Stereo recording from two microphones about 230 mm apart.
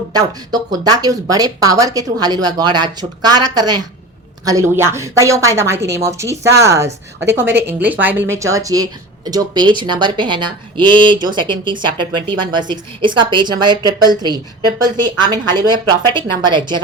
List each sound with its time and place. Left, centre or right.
0.1 s speech: centre
15.5 s speech: centre